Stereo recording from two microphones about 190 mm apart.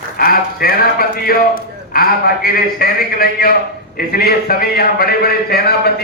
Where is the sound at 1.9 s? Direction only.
50° left (ahead or behind).